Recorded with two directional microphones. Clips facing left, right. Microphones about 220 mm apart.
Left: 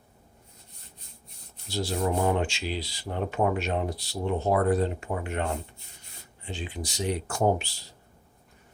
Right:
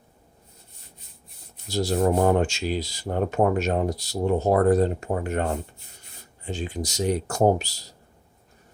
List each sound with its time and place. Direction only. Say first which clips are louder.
1.6 s speech: right 6 dB; 45° right (ahead or behind)